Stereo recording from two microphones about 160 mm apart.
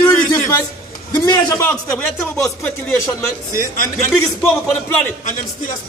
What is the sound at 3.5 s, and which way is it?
Speech, 60° left (ahead or behind).